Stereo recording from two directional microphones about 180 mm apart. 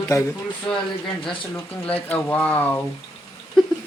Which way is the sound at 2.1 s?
10° left (ahead or behind).